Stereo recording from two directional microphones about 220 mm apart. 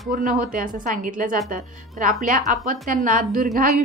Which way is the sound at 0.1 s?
40° right (ahead or behind).